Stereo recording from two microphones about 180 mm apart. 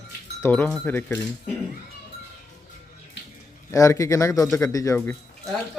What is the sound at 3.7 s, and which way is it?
A man's voice, 15° left (ahead or behind).